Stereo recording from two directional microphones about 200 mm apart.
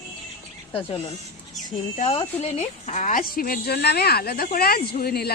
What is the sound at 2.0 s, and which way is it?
Speech, 30° left (ahead or behind).